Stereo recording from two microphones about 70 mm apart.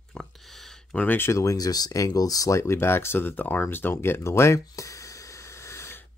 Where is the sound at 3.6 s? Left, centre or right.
Left.